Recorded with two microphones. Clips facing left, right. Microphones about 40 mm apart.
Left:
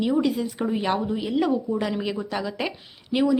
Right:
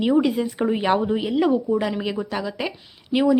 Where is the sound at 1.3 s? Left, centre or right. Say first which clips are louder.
Right 3 dB; centre.